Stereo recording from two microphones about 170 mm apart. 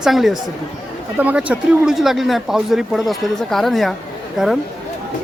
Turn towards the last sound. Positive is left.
turn(degrees=0)  # may be behind; listen again after turning